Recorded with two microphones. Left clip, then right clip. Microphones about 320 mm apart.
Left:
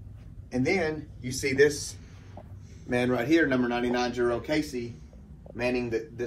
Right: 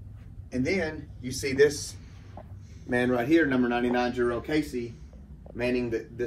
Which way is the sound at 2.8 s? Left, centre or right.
Centre.